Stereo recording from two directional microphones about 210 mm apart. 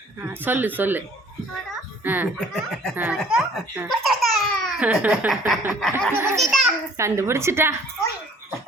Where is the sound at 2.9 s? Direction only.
10° right (ahead or behind).